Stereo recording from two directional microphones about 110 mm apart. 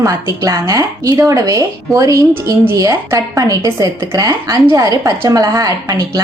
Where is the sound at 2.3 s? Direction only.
20° right (ahead or behind).